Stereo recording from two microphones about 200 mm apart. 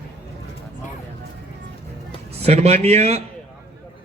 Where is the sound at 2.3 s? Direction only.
30° right (ahead or behind).